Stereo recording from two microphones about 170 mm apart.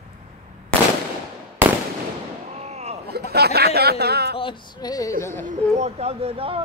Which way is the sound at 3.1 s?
70° right (ahead or behind).